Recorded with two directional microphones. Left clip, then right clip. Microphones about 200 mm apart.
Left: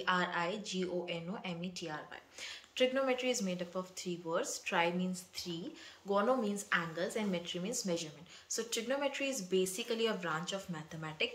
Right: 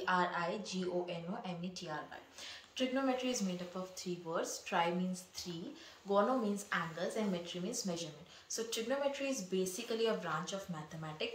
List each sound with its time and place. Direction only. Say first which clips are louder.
0.0 s speech: left 1 dB; 10° left (ahead or behind)